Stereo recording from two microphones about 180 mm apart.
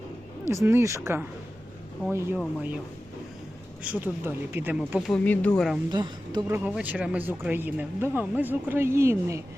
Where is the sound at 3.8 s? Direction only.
10° right (ahead or behind).